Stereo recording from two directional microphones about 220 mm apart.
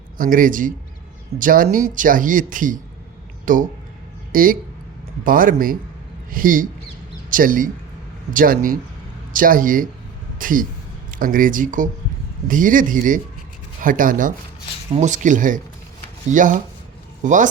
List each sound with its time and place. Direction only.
0.2 s speech: 40° right (ahead or behind)